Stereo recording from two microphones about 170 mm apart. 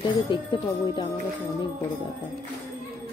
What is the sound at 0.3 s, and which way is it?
Speech, 30° left (ahead or behind).